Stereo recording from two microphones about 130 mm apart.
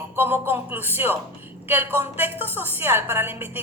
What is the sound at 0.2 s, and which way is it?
A woman's voice, 15° right (ahead or behind).